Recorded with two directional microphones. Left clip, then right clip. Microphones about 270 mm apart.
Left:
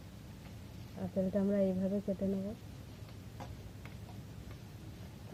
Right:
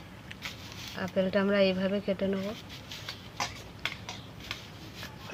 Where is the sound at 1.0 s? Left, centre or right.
Centre.